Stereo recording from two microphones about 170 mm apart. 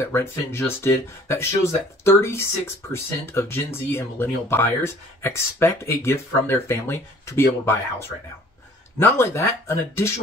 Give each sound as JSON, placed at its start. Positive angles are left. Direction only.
{"t": 0.0, "sound": "speech", "side_deg": 15}